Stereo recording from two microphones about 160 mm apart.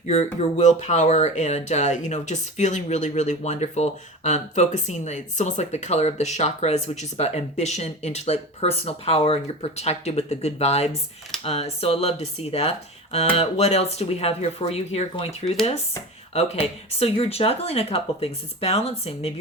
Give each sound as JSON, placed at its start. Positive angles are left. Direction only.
{"t": 0.1, "sound": "speech", "side_deg": 40}